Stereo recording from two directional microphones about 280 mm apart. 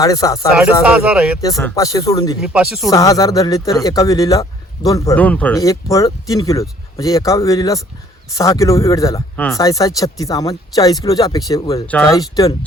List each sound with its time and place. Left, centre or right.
0.0 s speech: centre
0.5 s speech: centre
1.5 s speech: centre
2.4 s speech: centre
2.9 s speech: centre